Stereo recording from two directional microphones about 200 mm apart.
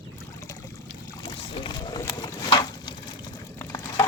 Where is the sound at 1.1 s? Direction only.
25° left (ahead or behind).